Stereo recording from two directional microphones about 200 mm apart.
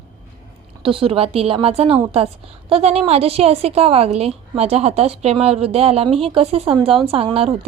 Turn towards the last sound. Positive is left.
turn(degrees=-30)  # may be behind; listen again after turning